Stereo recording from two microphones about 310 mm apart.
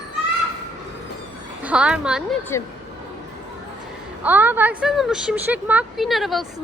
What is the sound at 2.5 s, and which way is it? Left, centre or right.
Speech, centre.